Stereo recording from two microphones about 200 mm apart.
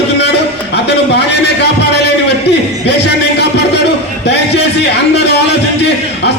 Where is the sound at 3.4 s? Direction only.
55° left (ahead or behind).